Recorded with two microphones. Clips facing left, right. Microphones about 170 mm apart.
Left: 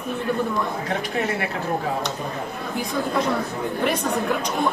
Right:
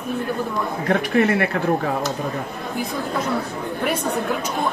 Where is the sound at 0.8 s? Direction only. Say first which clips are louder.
Right 7 dB; 60° right (ahead or behind).